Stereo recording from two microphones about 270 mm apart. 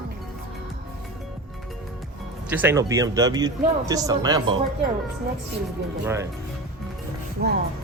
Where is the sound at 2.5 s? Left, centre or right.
Centre.